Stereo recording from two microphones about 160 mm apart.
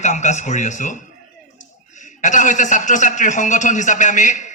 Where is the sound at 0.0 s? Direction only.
50° left (ahead or behind).